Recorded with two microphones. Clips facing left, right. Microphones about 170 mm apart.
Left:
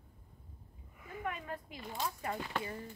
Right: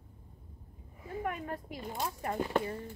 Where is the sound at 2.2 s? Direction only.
40° right (ahead or behind).